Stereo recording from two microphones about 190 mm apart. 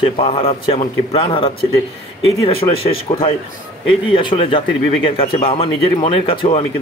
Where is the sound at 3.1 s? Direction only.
30° left (ahead or behind).